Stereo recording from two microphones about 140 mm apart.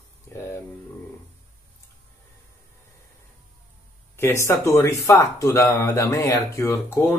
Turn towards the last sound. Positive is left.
turn(degrees=20)  # may be behind; listen again after turning